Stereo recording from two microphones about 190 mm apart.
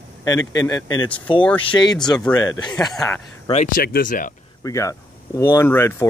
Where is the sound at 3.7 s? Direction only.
50° left (ahead or behind).